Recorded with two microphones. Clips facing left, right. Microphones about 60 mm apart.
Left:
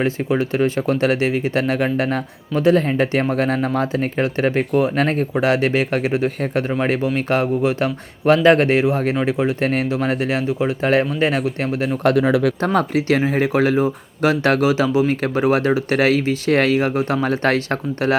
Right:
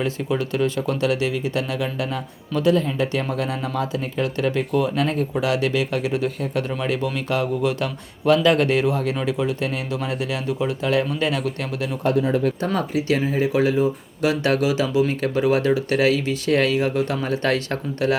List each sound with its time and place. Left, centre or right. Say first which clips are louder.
0.0 s speech: left 4 dB; left
2.6 s speech: left 4 dB; left
7.6 s speech: left 4 dB; left
9.9 s speech: left 6 dB; left
12.0 s speech: left 4 dB; left
12.6 s speech: left 4 dB; left